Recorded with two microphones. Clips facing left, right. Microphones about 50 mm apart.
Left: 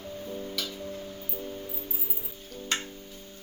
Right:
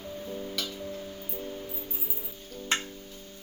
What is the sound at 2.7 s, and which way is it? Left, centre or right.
Music, right.